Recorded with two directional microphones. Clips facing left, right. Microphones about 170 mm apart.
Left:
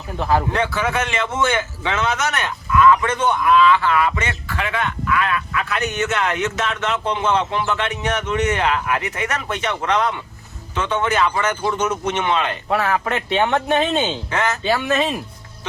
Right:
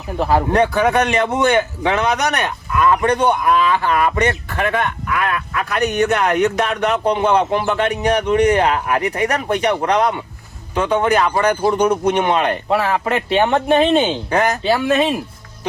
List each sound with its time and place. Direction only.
0.2 s speech: 30° right (ahead or behind)
0.7 s a man's voice: 40° right (ahead or behind)
4.6 s a man's voice: 50° right (ahead or behind)
12.6 s a man's voice: 25° right (ahead or behind)